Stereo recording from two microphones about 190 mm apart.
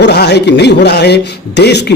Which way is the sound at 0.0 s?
60° left (ahead or behind).